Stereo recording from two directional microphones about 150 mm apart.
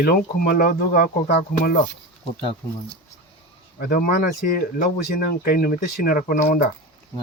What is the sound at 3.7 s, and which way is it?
Speech, 75° left (ahead or behind).